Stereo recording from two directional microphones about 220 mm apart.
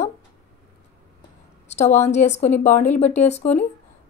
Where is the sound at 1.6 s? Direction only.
30° left (ahead or behind).